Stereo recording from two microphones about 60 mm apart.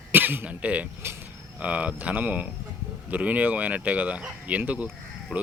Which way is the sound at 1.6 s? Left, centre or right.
Right.